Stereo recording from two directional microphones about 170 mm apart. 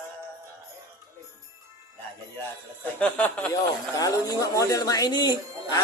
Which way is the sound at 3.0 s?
10° left (ahead or behind).